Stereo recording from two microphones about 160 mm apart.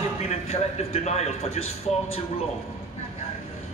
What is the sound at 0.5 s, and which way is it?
A man's voice, 40° left (ahead or behind).